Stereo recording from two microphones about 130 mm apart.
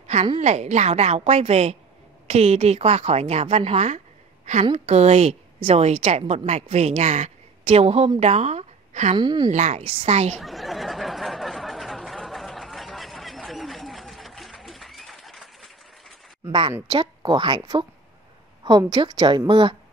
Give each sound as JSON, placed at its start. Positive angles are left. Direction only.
{"t": 0.0, "sound": "a sound", "side_deg": -60}
{"t": 0.4, "sound": "a woman's voice", "side_deg": -60}
{"t": 9.1, "sound": "a woman's voice", "side_deg": -35}
{"t": 9.5, "sound": "a woman's voice", "side_deg": -60}
{"t": 10.3, "sound": "a sound", "side_deg": 0}
{"t": 16.4, "sound": "a woman's voice", "side_deg": -40}